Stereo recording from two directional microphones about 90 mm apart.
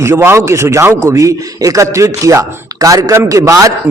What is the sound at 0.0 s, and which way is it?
A man's voice, 30° right (ahead or behind).